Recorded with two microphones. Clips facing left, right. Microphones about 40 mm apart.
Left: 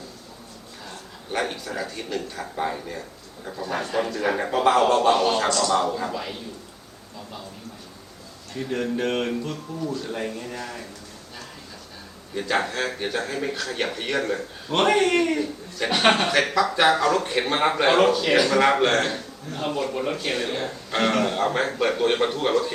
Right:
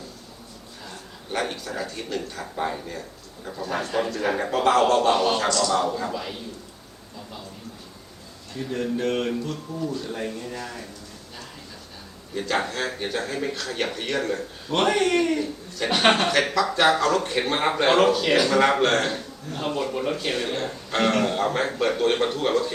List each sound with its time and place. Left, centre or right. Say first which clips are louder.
0.9 s a man's voice: left 1 dB; centre
8.8 s a sound: right 1 dB; left
9.9 s speech: left 1 dB; centre
12.3 s speech: left 1 dB; centre
14.8 s a sound: left 2 dB; centre
15.4 s a man's voice: left 1 dB; centre